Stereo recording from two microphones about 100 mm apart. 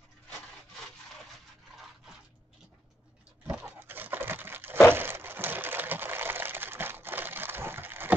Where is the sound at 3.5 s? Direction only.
20° right (ahead or behind).